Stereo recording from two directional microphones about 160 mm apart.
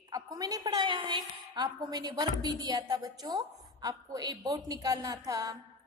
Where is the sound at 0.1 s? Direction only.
20° right (ahead or behind).